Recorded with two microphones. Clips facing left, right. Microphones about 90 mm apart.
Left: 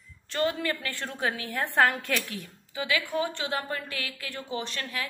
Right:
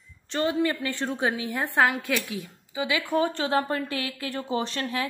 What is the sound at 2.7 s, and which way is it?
Speech, 20° right (ahead or behind).